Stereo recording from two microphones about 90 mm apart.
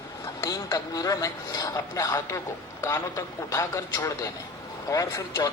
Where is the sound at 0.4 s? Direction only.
40° left (ahead or behind).